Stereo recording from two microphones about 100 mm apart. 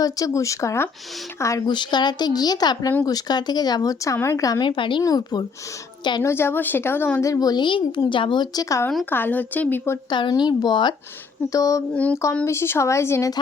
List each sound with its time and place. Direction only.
0.0 s speech: 35° left (ahead or behind)
1.6 s speech: 50° left (ahead or behind)
4.6 s a woman's voice: 55° left (ahead or behind)
5.0 s speech: 45° left (ahead or behind)
6.2 s speech: 25° left (ahead or behind)
7.2 s speech: 35° left (ahead or behind)
9.0 s speech: 20° left (ahead or behind)
10.1 s speech: 50° left (ahead or behind)
11.5 s speech: 35° left (ahead or behind)